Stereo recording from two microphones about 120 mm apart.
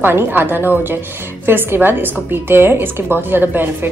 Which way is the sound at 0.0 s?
15° right (ahead or behind).